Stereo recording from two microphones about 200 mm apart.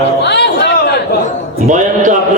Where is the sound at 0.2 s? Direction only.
60° left (ahead or behind).